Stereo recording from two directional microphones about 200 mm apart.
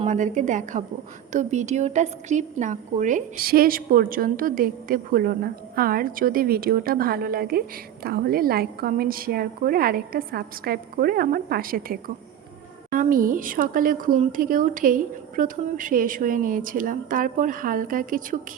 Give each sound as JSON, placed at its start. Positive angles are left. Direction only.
{"t": 0.0, "sound": "a woman's voice", "side_deg": -40}